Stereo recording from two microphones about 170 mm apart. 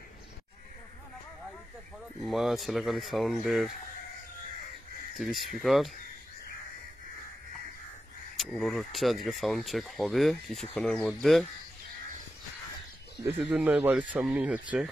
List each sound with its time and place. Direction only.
2.2 s speech: centre (ahead or behind)
5.1 s speech: centre (ahead or behind)
8.4 s speech: centre (ahead or behind)
13.5 s speech: 5° right (ahead or behind)